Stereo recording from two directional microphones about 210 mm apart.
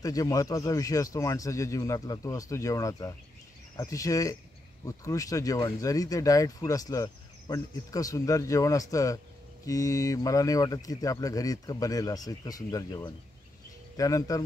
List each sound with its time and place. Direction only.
0.0 s speech: 15° left (ahead or behind)